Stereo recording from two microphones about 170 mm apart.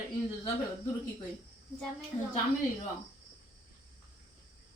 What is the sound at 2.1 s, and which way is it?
Speech, 35° left (ahead or behind).